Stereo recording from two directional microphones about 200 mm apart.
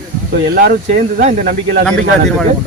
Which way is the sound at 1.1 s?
40° right (ahead or behind).